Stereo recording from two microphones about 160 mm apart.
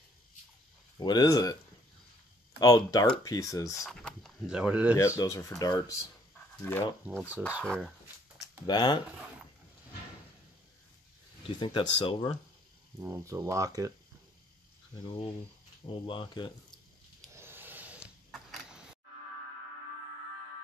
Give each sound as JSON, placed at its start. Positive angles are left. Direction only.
{"t": 0.9, "sound": "speech", "side_deg": 25}
{"t": 2.6, "sound": "speech", "side_deg": 20}
{"t": 3.8, "sound": "speech", "side_deg": 0}
{"t": 4.9, "sound": "speech", "side_deg": 20}
{"t": 7.2, "sound": "speech", "side_deg": -10}
{"t": 8.6, "sound": "speech", "side_deg": 25}
{"t": 11.6, "sound": "speech", "side_deg": 30}
{"t": 13.0, "sound": "speech", "side_deg": -15}
{"t": 15.0, "sound": "speech", "side_deg": 30}
{"t": 17.4, "sound": "a sound", "side_deg": -15}